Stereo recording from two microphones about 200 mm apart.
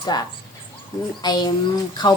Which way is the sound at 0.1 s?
20° left (ahead or behind).